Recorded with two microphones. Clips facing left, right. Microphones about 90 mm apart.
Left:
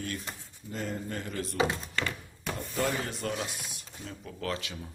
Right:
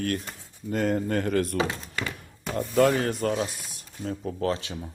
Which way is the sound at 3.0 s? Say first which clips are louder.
Right 8 dB; 45° right (ahead or behind).